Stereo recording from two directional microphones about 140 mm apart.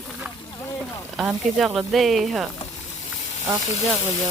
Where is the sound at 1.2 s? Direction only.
5° right (ahead or behind).